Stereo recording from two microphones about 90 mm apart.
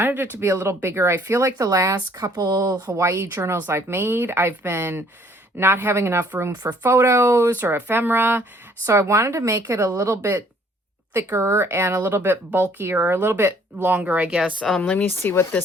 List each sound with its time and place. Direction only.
0.0 s speech: 20° right (ahead or behind)
8.9 s a woman's voice: 35° right (ahead or behind)
10.2 s speech: 20° right (ahead or behind)
14.6 s speech: 15° left (ahead or behind)